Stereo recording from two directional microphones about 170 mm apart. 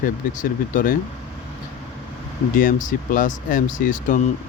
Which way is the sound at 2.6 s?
50° left (ahead or behind).